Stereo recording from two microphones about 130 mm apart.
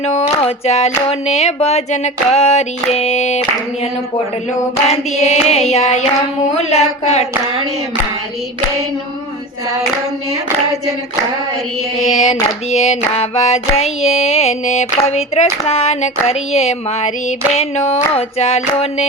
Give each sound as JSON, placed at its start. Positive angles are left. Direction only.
{"t": 0.0, "sound": "speech", "side_deg": 55}
{"t": 4.9, "sound": "speech", "side_deg": 55}
{"t": 12.1, "sound": "speech", "side_deg": 65}